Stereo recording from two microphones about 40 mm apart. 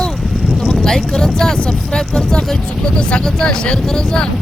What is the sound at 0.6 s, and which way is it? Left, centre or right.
Speech, centre.